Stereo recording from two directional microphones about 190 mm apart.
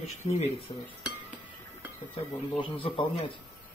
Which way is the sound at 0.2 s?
35° left (ahead or behind).